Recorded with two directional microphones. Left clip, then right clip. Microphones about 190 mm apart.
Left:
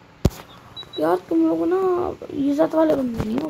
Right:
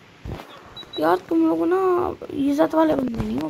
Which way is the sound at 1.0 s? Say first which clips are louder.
Even; 20° right (ahead or behind).